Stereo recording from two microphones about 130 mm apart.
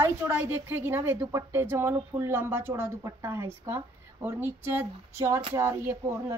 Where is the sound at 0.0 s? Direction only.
15° right (ahead or behind).